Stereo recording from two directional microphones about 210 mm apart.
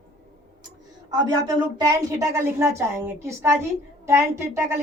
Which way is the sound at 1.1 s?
20° right (ahead or behind).